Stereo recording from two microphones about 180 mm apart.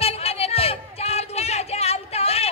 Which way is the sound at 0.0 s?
35° left (ahead or behind).